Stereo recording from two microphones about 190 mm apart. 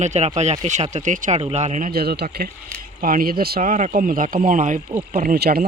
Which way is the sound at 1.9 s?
55° right (ahead or behind).